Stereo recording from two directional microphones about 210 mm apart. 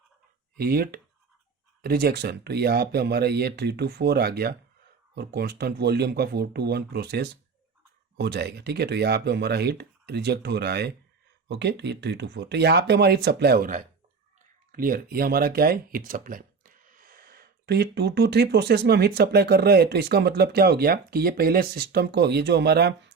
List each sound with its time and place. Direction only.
0.5 s speech: 45° right (ahead or behind)